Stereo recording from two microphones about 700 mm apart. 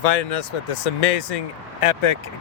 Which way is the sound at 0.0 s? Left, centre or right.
Left.